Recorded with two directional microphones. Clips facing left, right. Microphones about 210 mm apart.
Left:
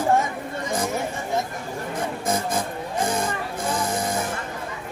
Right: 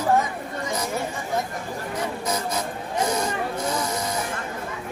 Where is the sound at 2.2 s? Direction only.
50° left (ahead or behind).